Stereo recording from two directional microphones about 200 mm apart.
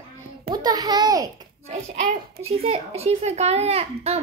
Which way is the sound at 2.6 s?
30° right (ahead or behind).